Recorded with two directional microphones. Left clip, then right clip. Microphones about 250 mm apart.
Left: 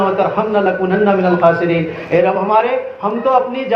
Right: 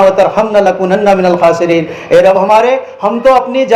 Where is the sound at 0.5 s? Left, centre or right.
Right.